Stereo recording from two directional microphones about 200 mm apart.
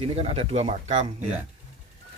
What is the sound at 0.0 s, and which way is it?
Cutlery, 30° right (ahead or behind).